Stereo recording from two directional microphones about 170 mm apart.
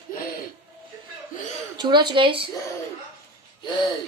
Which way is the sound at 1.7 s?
25° right (ahead or behind).